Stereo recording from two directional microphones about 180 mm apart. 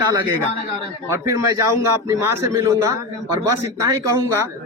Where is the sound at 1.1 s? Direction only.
20° right (ahead or behind).